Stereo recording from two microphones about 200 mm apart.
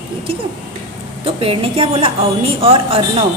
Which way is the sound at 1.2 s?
30° right (ahead or behind).